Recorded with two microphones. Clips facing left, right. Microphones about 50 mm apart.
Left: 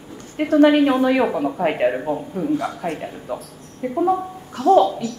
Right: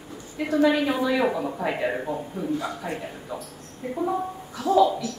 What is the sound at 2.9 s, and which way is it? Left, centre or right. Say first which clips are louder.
A woman's voice: left 5 dB; left.